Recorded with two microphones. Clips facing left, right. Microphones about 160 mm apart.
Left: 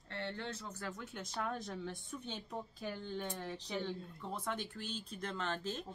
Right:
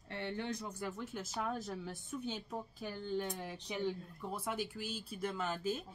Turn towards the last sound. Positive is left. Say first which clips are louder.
# right 2 dB
turn(degrees=-10)  # may be behind; listen again after turning